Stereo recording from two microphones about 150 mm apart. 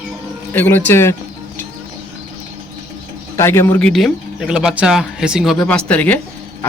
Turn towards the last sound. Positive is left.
turn(degrees=10)  # may be behind; listen again after turning